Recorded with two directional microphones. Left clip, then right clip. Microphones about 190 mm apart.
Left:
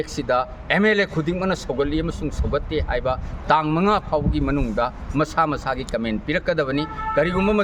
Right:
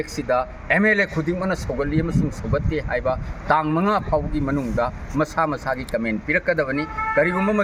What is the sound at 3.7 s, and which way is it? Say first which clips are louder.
Speech: left 1 dB; 10° left (ahead or behind).